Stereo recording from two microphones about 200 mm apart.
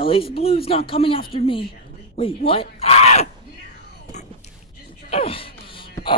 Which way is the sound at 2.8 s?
30° left (ahead or behind).